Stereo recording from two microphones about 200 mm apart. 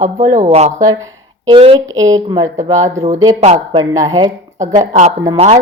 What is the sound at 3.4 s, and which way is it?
Speech, 35° right (ahead or behind).